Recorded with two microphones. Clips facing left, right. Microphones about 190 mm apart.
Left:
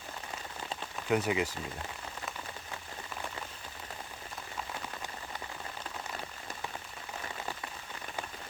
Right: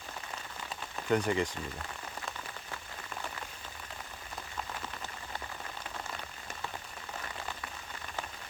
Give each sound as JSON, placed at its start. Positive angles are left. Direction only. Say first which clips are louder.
{"t": 1.1, "sound": "speech", "louder": "even", "side_deg": 5}